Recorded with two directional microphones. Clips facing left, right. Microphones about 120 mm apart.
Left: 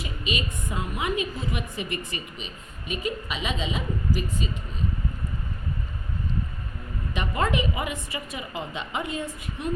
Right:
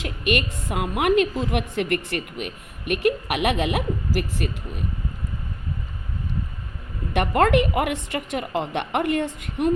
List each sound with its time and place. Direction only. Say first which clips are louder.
0.0 s a woman's voice: right 7 dB; 75° right (ahead or behind)
7.1 s a woman's voice: right 8 dB; 70° right (ahead or behind)